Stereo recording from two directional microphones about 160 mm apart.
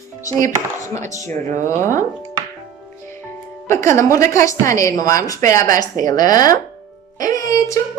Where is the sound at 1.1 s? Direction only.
20° left (ahead or behind).